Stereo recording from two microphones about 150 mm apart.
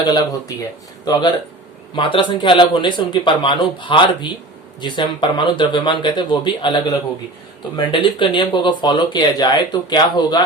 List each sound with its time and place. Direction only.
0.0 s speech: 25° left (ahead or behind)